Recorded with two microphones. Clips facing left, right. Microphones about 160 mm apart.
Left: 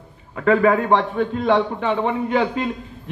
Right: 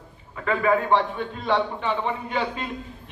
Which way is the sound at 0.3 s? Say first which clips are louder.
Left 6 dB; 45° left (ahead or behind).